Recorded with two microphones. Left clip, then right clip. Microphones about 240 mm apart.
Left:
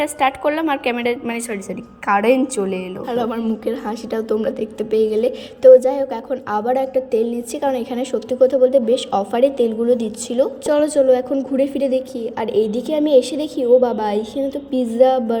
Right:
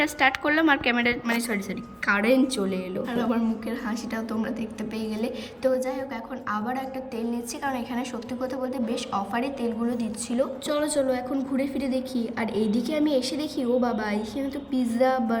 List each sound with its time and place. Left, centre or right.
0.0 s a woman's voice: centre
3.1 s a woman's voice: centre